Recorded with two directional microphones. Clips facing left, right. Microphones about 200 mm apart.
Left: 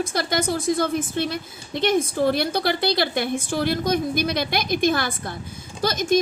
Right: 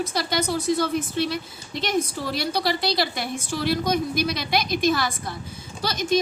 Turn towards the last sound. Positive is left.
turn(degrees=50)  # may be behind; listen again after turning